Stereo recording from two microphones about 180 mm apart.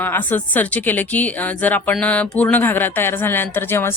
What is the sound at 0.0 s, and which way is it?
A woman's voice, 10° left (ahead or behind).